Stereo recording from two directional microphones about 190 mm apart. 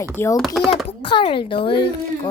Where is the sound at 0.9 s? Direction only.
25° left (ahead or behind).